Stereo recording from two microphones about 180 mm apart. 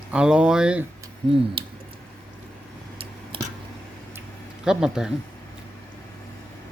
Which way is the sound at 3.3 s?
30° right (ahead or behind).